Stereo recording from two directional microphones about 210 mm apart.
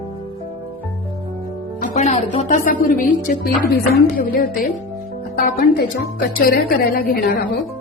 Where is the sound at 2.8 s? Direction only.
40° left (ahead or behind).